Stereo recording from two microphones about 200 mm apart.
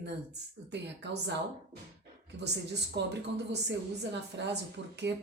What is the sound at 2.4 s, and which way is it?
Speech, 55° right (ahead or behind).